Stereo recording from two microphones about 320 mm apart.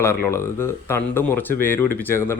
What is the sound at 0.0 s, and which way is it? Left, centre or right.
Speech, centre.